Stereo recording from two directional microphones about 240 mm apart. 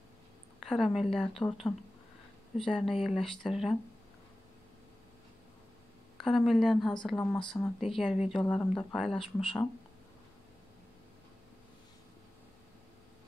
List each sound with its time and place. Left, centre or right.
0.6 s speech: centre
6.2 s speech: centre